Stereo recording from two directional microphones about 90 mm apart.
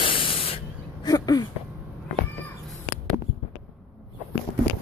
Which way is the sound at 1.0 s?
45° left (ahead or behind).